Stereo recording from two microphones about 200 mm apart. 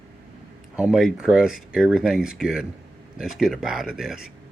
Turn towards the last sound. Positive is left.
turn(degrees=-5)  # may be behind; listen again after turning